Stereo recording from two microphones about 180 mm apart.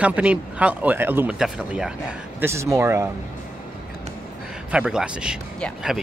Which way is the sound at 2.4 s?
15° right (ahead or behind).